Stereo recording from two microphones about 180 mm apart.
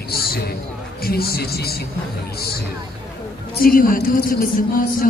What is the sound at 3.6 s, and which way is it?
Speech, 50° left (ahead or behind).